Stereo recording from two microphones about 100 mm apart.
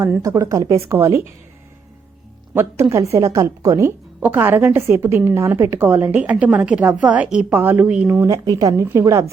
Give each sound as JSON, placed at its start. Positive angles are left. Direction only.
{"t": 0.2, "sound": "a woman's voice", "side_deg": -30}
{"t": 2.9, "sound": "a woman's voice", "side_deg": -30}
{"t": 4.2, "sound": "a woman's voice", "side_deg": -15}
{"t": 8.3, "sound": "a woman's voice", "side_deg": -40}
{"t": 8.7, "sound": "a woman's voice", "side_deg": -25}